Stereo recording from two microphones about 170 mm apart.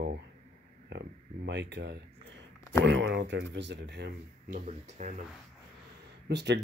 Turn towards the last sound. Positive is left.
turn(degrees=-85)